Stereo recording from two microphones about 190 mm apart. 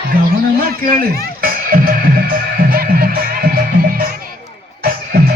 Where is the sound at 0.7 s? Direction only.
50° right (ahead or behind).